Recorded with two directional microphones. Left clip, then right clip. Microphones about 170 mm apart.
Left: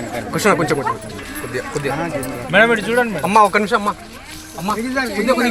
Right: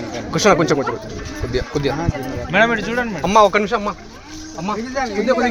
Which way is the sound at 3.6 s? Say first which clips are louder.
Left 3 dB; 30° right (ahead or behind).